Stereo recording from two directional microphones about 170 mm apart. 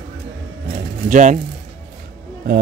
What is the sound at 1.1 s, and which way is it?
Speech, 45° right (ahead or behind).